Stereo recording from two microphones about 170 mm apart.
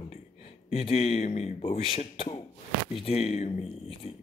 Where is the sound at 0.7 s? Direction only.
35° left (ahead or behind).